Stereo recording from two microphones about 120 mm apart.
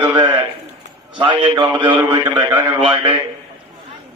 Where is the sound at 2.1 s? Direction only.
35° right (ahead or behind).